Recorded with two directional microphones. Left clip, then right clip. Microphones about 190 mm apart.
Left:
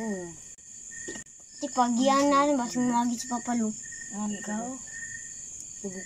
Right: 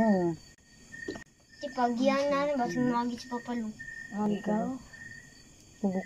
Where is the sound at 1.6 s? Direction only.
25° left (ahead or behind).